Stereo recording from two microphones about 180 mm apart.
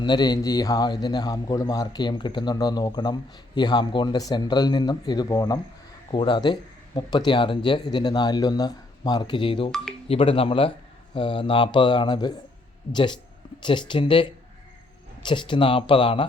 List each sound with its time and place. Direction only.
0.0 s a man's voice: 25° left (ahead or behind)